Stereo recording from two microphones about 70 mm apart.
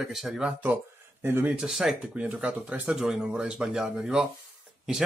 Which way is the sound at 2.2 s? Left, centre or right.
Centre.